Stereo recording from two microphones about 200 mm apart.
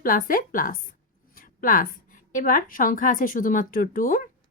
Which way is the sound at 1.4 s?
45° left (ahead or behind).